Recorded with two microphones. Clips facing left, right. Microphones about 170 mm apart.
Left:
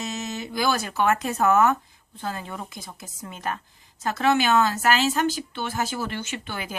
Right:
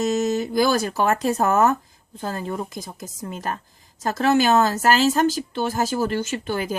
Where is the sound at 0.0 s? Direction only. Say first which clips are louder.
Right 10 dB; 40° right (ahead or behind).